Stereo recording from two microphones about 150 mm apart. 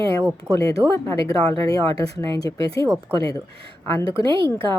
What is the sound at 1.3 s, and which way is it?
Speech, 35° right (ahead or behind).